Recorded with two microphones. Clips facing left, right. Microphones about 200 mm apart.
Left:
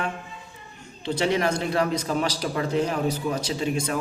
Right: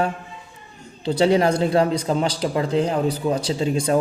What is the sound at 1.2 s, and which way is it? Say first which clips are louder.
A man's voice: right 7 dB; 30° right (ahead or behind).